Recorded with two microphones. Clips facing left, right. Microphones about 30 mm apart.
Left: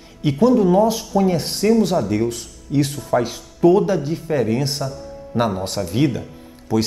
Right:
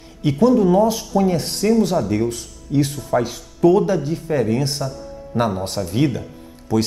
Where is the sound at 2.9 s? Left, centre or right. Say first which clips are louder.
Even; left.